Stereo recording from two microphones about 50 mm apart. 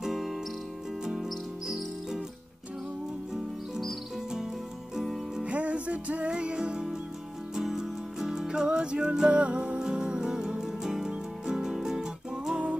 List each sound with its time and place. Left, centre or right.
0.0 s music: centre
1.0 s cricket: centre
1.3 s cricket: centre
4.9 s music: centre
5.4 s music: right